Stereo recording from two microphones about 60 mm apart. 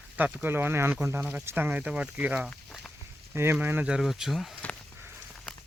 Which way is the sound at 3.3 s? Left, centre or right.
Right.